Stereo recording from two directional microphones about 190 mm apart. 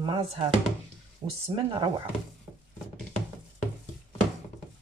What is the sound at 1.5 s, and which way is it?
Speech, 25° right (ahead or behind).